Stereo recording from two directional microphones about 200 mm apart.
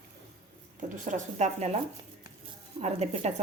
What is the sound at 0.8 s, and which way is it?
Speech, 35° right (ahead or behind).